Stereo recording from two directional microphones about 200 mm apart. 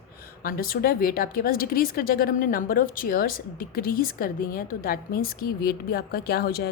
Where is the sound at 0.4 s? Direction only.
45° left (ahead or behind).